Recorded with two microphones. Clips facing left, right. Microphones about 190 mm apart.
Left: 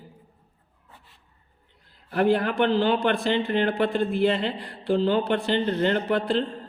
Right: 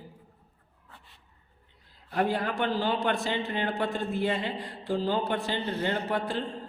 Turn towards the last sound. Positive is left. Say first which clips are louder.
# left 6 dB
turn(degrees=65)  # may be behind; listen again after turning